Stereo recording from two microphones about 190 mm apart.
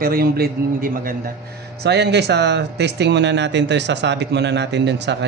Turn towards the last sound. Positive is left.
turn(degrees=-65)  # may be behind; listen again after turning